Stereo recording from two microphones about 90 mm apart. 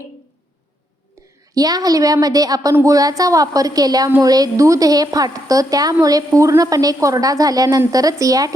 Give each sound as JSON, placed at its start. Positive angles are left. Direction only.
{"t": 1.5, "sound": "a woman's voice", "side_deg": -45}